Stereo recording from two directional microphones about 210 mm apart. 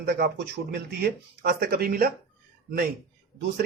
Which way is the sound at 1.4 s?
50° right (ahead or behind).